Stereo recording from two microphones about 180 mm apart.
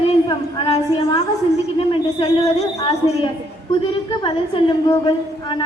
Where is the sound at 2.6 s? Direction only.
35° left (ahead or behind).